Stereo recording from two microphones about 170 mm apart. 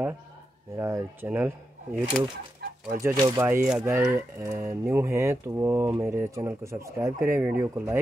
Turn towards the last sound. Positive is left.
turn(degrees=-10)  # may be behind; listen again after turning